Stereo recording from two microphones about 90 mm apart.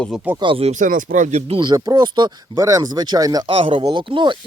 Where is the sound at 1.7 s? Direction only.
45° right (ahead or behind).